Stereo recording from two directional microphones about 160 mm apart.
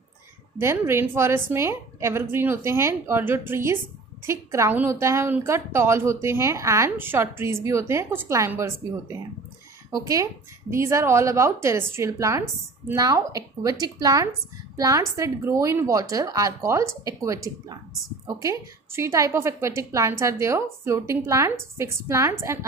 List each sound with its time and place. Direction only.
0.6 s a woman's voice: 15° right (ahead or behind)